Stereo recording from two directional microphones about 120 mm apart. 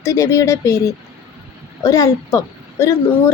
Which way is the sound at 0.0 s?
25° left (ahead or behind).